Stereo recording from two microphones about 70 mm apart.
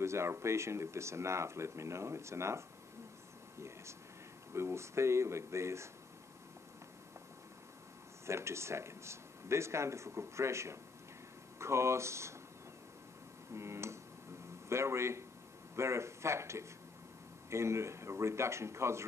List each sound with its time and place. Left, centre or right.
0.0 s speech: right
3.5 s a sound: right
4.6 s speech: right
8.3 s speech: right
13.5 s a sound: right
14.7 s speech: right